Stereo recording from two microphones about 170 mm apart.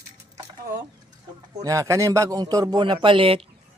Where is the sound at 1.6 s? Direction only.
20° right (ahead or behind).